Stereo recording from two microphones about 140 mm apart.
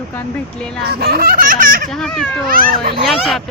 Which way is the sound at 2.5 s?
90° right.